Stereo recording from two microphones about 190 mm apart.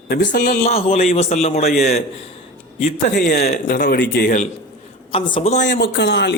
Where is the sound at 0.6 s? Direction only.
35° left (ahead or behind).